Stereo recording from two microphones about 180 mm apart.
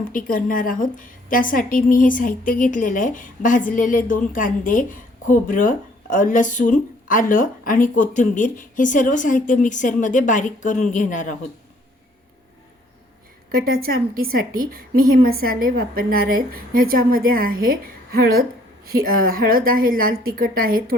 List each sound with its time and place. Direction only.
0.1 s a woman's voice: 50° left (ahead or behind)
13.5 s a woman's voice: 55° right (ahead or behind)